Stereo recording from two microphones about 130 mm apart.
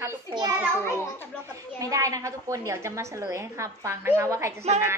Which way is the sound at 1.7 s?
25° right (ahead or behind).